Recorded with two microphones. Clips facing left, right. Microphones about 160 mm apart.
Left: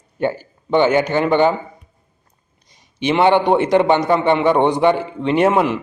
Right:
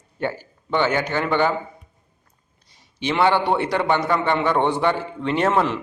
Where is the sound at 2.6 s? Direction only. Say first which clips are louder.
Left 6 dB; 15° left (ahead or behind).